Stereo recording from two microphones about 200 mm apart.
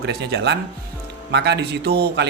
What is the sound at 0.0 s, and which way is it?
Speech, 55° right (ahead or behind).